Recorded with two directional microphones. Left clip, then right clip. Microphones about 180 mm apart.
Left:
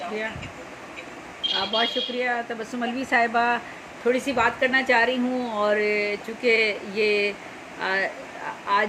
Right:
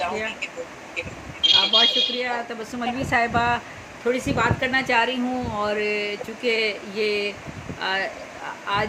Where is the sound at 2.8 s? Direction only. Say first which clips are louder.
Even; centre (ahead or behind).